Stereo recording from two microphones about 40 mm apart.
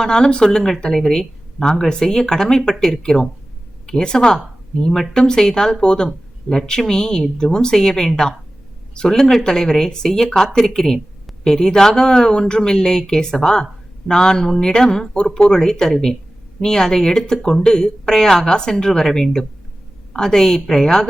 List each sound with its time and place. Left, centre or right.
0.0 s speech: centre
6.1 s speech: centre